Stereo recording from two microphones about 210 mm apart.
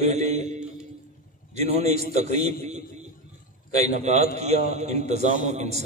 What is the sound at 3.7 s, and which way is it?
A man's voice, 30° right (ahead or behind).